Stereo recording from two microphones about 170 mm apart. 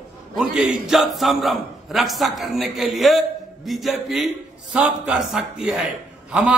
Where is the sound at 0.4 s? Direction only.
Centre (ahead or behind).